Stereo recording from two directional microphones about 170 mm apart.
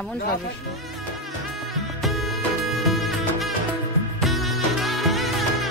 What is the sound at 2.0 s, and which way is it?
Music, centre (ahead or behind).